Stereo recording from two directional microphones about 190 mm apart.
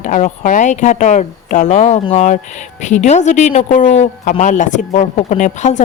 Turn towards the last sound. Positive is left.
turn(degrees=40)  # may be behind; listen again after turning